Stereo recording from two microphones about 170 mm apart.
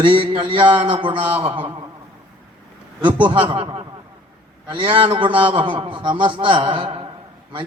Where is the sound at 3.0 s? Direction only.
30° right (ahead or behind).